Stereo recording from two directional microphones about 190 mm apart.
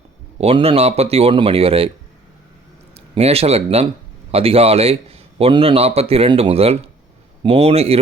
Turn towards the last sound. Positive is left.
turn(degrees=-30)  # may be behind; listen again after turning